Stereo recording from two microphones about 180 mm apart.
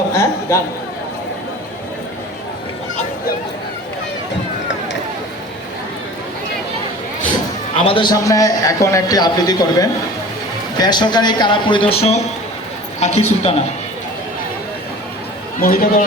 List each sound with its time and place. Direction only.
0.1 s a sound: 15° left (ahead or behind)
7.9 s a man's voice: 25° left (ahead or behind)
15.6 s a man's voice: 50° left (ahead or behind)